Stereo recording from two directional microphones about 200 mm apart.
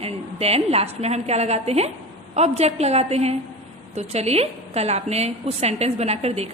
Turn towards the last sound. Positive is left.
turn(degrees=-30)  # may be behind; listen again after turning